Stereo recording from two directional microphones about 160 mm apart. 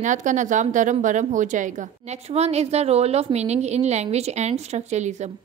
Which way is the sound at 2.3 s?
40° right (ahead or behind).